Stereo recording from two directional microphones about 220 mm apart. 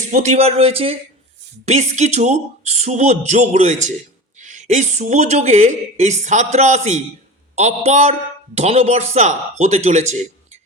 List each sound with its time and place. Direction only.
0.1 s a woman's voice: 30° right (ahead or behind)